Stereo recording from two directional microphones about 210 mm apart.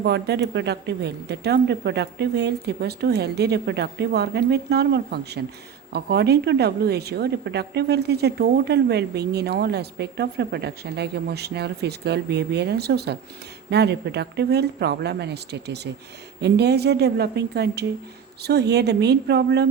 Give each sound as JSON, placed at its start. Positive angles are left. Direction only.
{"t": 0.0, "sound": "a woman's voice", "side_deg": -55}